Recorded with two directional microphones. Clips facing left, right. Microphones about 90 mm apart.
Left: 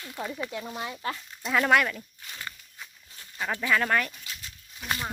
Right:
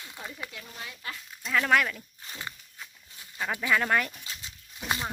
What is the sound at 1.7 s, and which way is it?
Speech, centre (ahead or behind).